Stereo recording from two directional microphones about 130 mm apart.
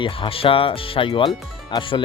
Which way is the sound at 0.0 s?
45° left (ahead or behind).